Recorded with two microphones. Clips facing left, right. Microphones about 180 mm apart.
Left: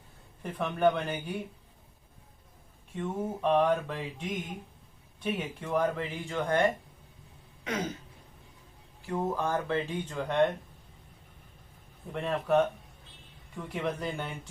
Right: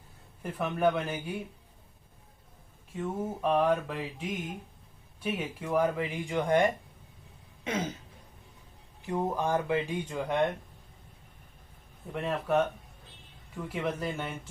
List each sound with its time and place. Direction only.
0.4 s speech: 5° right (ahead or behind)
2.9 s speech: 5° right (ahead or behind)
7.6 s throat clearing: 25° right (ahead or behind)
9.0 s speech: 15° right (ahead or behind)
12.1 s speech: 5° right (ahead or behind)